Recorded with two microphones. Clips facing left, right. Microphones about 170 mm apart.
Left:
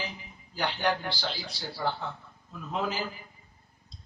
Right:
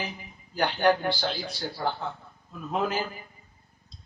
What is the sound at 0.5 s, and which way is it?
A man's voice, 50° right (ahead or behind).